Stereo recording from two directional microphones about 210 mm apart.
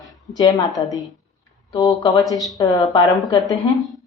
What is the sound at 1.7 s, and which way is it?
Speech, 20° left (ahead or behind).